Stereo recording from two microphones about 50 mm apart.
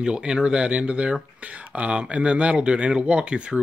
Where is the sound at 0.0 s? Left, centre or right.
Centre.